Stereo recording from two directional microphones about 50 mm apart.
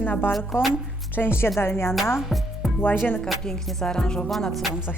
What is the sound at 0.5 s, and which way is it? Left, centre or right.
A woman's voice, left.